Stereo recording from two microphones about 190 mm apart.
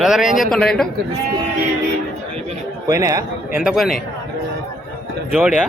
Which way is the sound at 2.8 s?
20° right (ahead or behind).